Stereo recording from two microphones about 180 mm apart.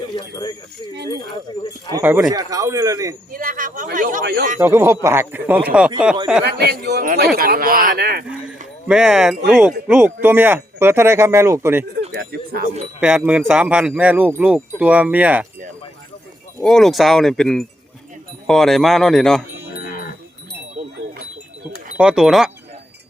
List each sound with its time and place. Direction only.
0.2 s speech: 20° left (ahead or behind)
1.9 s speech: 10° right (ahead or behind)
3.3 s speech: 50° right (ahead or behind)
4.6 s speech: 15° right (ahead or behind)
6.4 s a man's voice: 65° right (ahead or behind)
8.9 s speech: 5° right (ahead or behind)
12.1 s a man's voice: 60° right (ahead or behind)
13.0 s speech: 5° right (ahead or behind)
16.6 s speech: centre (ahead or behind)
21.9 s speech: 5° right (ahead or behind)